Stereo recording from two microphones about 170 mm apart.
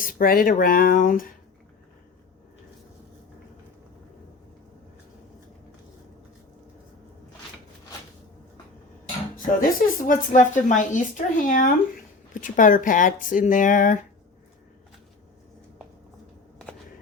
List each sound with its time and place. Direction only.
0.0 s speech: 55° left (ahead or behind)
9.3 s a woman's voice: 55° left (ahead or behind)